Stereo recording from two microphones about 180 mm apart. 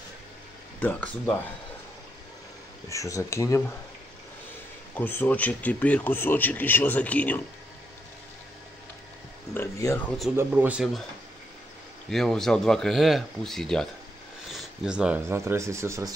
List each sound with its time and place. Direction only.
0.7 s speech: 10° left (ahead or behind)
2.9 s speech: 15° left (ahead or behind)
4.9 s speech: 10° left (ahead or behind)
9.5 s speech: 15° left (ahead or behind)
10.3 s speech: 10° right (ahead or behind)
12.1 s speech: centre (ahead or behind)
14.5 s a sound: centre (ahead or behind)
15.2 s speech: 15° right (ahead or behind)